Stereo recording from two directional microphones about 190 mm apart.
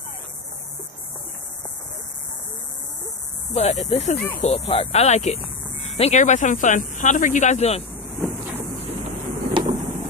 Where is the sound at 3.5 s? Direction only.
35° left (ahead or behind).